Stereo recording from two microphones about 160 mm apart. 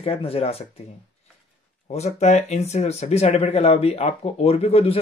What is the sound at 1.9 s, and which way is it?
Speech, 45° left (ahead or behind).